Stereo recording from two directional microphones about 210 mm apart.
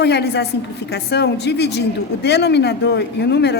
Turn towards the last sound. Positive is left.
turn(degrees=55)  # may be behind; listen again after turning